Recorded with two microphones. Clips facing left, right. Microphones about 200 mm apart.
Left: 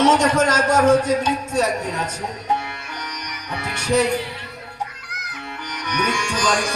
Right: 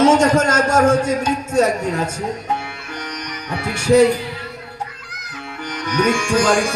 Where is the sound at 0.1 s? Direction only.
30° right (ahead or behind).